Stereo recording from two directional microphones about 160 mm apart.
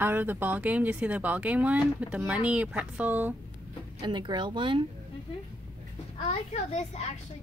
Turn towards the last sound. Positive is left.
turn(degrees=45)  # may be behind; listen again after turning